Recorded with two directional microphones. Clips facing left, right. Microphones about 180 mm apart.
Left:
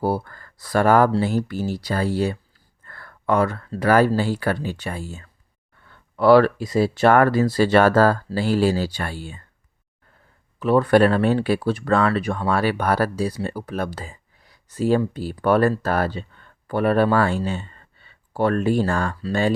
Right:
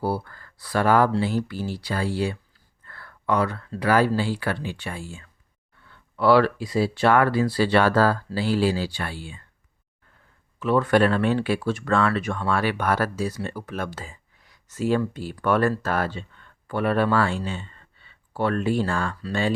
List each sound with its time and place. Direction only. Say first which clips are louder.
0.0 s speech: left 3 dB; 45° left (ahead or behind)
10.6 s speech: left 4 dB; 35° left (ahead or behind)